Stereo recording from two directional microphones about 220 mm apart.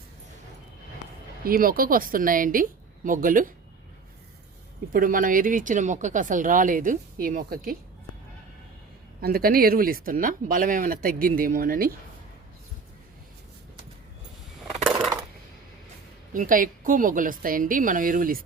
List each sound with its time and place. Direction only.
1.5 s speech: 40° right (ahead or behind)
4.9 s speech: 40° right (ahead or behind)
9.2 s speech: 45° right (ahead or behind)
16.3 s speech: 35° right (ahead or behind)